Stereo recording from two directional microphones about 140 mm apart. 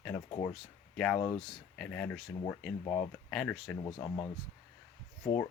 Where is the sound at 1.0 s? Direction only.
10° left (ahead or behind).